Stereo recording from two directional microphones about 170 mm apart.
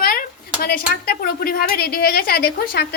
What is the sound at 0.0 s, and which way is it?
Speech, 60° left (ahead or behind).